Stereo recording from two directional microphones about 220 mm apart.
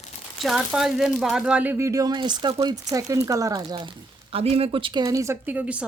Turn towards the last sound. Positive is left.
turn(degrees=-5)  # may be behind; listen again after turning